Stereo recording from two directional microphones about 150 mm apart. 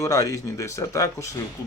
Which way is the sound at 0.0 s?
20° left (ahead or behind).